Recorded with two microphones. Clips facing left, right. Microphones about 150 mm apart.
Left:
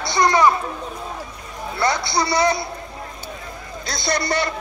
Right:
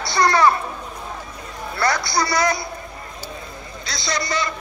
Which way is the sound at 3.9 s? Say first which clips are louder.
Left 3 dB; 55° left (ahead or behind).